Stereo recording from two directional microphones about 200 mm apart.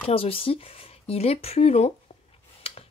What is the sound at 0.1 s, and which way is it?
Speech, 30° left (ahead or behind).